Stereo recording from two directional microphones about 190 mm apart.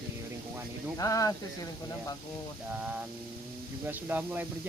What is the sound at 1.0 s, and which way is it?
Speech, 15° left (ahead or behind).